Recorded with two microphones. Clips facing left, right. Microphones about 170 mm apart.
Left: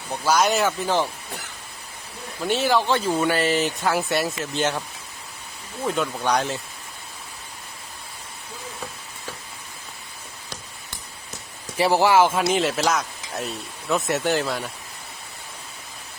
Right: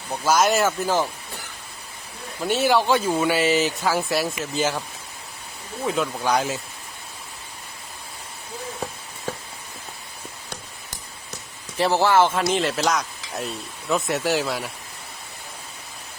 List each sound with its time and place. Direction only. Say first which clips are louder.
0.1 s speech: right 1 dB; 5° right (ahead or behind)
2.4 s speech: right 1 dB; 5° right (ahead or behind)
5.8 s speech: even; centre (ahead or behind)
11.8 s speech: left 1 dB; 10° left (ahead or behind)